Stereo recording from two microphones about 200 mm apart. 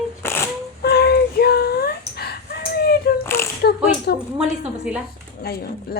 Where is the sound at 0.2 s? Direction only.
10° left (ahead or behind).